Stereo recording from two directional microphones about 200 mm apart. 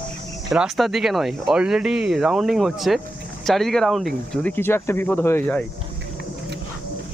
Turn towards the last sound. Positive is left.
turn(degrees=10)  # may be behind; listen again after turning